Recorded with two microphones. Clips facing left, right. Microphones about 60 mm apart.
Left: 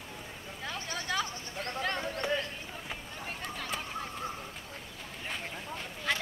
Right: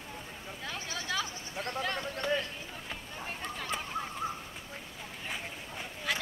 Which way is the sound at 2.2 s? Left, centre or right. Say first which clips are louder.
Right 1 dB; centre.